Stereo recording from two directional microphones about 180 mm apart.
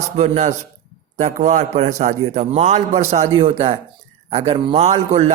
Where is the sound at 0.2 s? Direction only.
40° right (ahead or behind).